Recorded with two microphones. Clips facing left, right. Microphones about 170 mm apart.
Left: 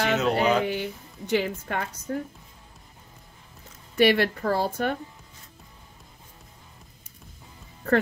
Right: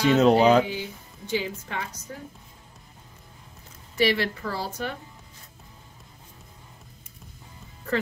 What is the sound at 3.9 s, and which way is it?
A woman's voice, 55° left (ahead or behind).